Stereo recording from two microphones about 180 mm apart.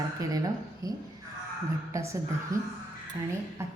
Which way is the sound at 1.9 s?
15° right (ahead or behind).